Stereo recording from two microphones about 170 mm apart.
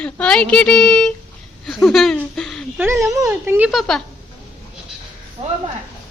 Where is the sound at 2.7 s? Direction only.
15° right (ahead or behind).